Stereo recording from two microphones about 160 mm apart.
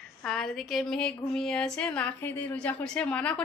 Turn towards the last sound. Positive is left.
turn(degrees=5)  # may be behind; listen again after turning